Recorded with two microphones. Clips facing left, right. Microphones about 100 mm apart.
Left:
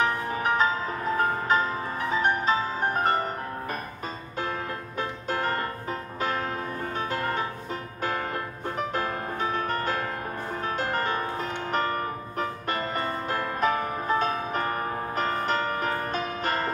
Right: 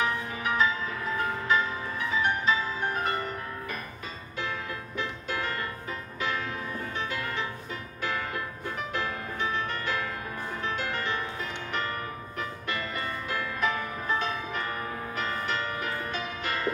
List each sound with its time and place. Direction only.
0.0 s music: 45° left (ahead or behind)
4.4 s music: 45° left (ahead or behind)
8.6 s music: 45° left (ahead or behind)